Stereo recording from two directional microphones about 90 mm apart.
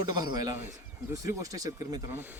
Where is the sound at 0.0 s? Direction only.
50° right (ahead or behind).